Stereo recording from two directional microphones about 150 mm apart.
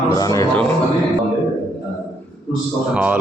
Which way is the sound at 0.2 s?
25° left (ahead or behind).